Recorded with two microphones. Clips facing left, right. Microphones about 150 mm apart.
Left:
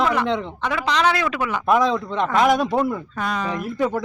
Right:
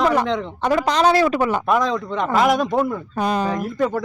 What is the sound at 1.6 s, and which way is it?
Speech, centre (ahead or behind).